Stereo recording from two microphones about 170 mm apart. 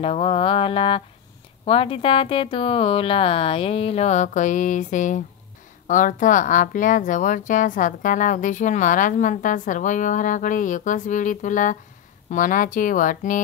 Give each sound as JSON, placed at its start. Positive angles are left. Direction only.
{"t": 0.0, "sound": "speech", "side_deg": 35}